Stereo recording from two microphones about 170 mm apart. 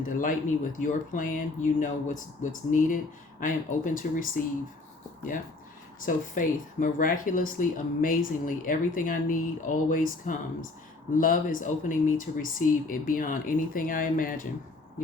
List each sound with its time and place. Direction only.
0.2 s speech: 50° left (ahead or behind)
6.0 s speech: 50° left (ahead or behind)